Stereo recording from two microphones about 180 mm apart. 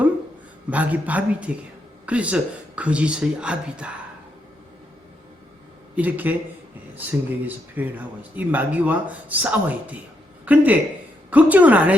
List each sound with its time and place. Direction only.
0.7 s speech: 10° right (ahead or behind)
6.0 s speech: 10° right (ahead or behind)